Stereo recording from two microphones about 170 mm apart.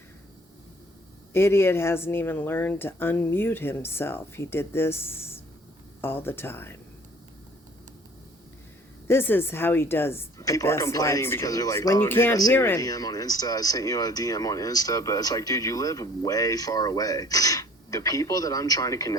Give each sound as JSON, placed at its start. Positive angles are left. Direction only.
{"t": 1.3, "sound": "speech", "side_deg": 15}
{"t": 9.0, "sound": "speech", "side_deg": 15}